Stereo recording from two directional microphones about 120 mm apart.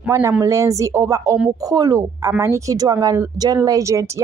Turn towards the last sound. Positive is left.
turn(degrees=-25)  # may be behind; listen again after turning